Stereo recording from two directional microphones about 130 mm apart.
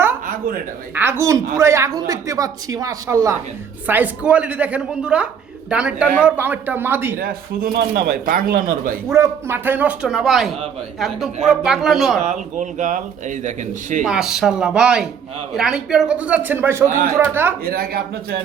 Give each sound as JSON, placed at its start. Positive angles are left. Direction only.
{"t": 0.9, "sound": "speech", "side_deg": -20}
{"t": 3.8, "sound": "a woman's voice", "side_deg": -15}
{"t": 7.6, "sound": "speech", "side_deg": -90}
{"t": 9.0, "sound": "a woman's voice", "side_deg": -20}
{"t": 12.2, "sound": "a man's voice", "side_deg": -65}
{"t": 14.0, "sound": "a woman's voice", "side_deg": -5}